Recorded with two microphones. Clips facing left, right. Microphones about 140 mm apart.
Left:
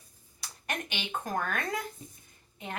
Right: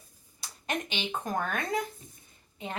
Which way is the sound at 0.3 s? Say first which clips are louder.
Right 3 dB; 20° right (ahead or behind).